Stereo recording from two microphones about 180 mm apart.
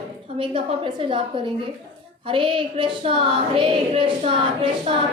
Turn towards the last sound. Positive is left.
turn(degrees=-25)  # may be behind; listen again after turning